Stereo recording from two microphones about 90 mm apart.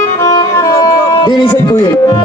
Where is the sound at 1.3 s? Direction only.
60° left (ahead or behind).